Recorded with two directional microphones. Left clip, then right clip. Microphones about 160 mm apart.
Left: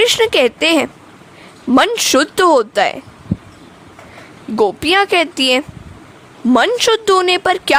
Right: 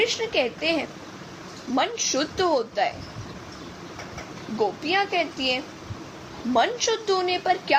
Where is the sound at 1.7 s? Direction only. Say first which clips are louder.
Left 12 dB; 75° left (ahead or behind).